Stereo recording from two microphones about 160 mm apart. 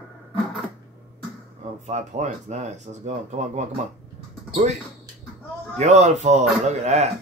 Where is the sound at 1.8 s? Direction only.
45° right (ahead or behind).